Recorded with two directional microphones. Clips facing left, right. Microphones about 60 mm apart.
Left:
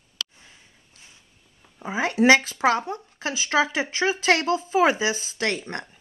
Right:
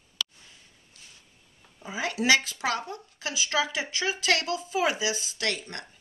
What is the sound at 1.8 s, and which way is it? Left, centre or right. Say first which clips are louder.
Speech: left 8 dB; left.